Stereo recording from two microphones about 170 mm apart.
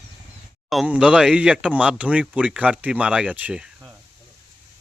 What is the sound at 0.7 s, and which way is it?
Speech, 5° right (ahead or behind).